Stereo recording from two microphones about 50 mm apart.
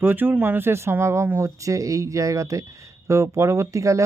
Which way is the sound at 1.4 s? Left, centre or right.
Right.